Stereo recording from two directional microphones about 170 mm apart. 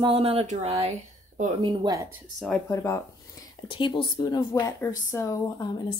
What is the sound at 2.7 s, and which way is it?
Speech, 15° left (ahead or behind).